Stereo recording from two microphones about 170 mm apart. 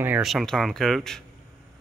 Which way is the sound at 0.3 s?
Centre (ahead or behind).